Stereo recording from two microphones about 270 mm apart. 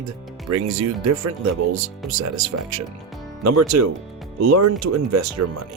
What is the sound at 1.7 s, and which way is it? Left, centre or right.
Speech, right.